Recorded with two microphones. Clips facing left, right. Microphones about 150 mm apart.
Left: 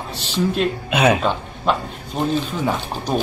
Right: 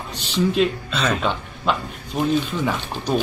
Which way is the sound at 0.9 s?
60° left (ahead or behind).